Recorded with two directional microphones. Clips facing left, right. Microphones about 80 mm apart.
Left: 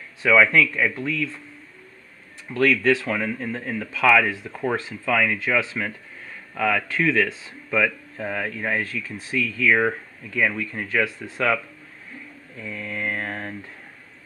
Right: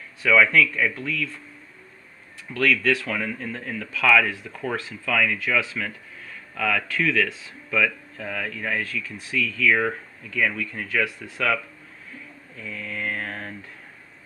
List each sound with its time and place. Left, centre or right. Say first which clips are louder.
0.2 s speech: left 1 dB; centre
2.5 s speech: left 3 dB; left
12.6 s mantra: left 2 dB; centre